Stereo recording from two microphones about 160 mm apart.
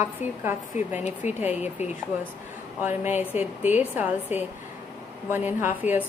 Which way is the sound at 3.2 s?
10° right (ahead or behind).